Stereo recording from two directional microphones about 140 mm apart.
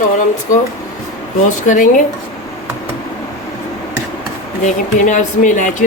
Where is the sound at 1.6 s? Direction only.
65° left (ahead or behind).